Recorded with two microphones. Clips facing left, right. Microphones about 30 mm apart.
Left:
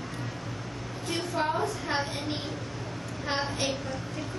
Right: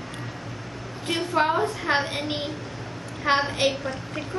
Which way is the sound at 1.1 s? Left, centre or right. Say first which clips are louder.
Right 6 dB; right.